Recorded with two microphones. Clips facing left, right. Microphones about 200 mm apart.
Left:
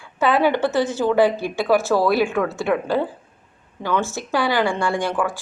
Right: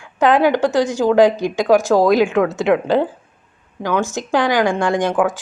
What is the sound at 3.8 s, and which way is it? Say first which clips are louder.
A woman's voice: right 3 dB; 15° right (ahead or behind).